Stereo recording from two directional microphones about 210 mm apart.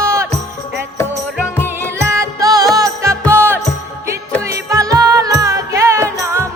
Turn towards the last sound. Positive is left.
turn(degrees=-15)  # may be behind; listen again after turning